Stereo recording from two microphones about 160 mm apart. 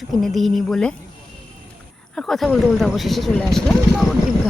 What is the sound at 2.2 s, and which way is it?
Speech, centre (ahead or behind).